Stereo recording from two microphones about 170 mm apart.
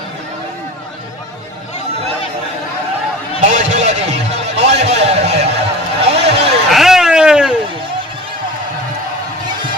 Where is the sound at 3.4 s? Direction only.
45° right (ahead or behind).